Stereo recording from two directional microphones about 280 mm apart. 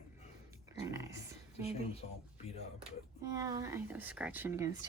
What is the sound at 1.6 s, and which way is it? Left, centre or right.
Speech, left.